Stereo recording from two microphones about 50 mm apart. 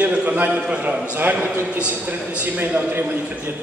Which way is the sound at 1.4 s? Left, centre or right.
Right.